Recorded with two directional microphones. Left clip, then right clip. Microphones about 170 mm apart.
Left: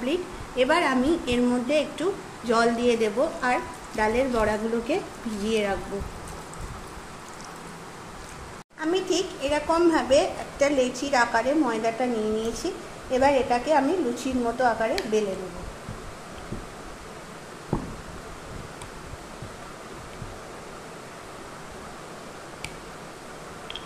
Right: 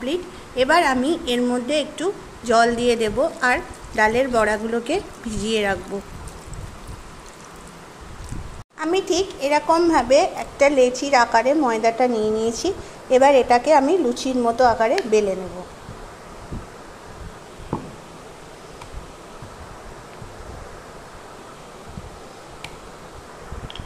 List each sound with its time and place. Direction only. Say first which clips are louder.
0.0 s a woman's voice: right 2 dB; 30° right (ahead or behind)
8.7 s a woman's voice: right 5 dB; 50° right (ahead or behind)